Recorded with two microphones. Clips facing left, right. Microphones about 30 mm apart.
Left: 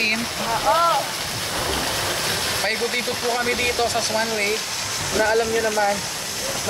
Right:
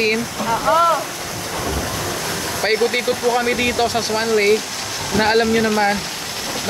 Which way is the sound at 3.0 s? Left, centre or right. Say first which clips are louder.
Right 5 dB; left.